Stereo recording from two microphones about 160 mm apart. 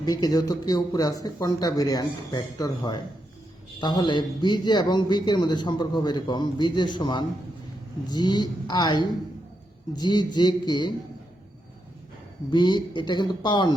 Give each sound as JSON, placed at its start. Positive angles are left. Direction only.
{"t": 0.0, "sound": "a man's voice", "side_deg": 25}
{"t": 12.5, "sound": "a man's voice", "side_deg": 25}